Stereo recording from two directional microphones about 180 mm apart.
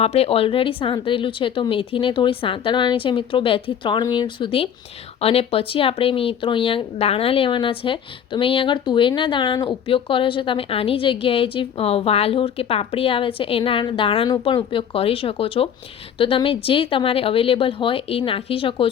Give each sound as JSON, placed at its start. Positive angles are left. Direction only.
{"t": 0.0, "sound": "a woman's voice", "side_deg": 35}